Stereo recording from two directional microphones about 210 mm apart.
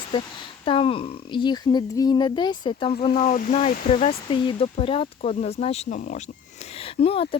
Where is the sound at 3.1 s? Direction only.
40° left (ahead or behind).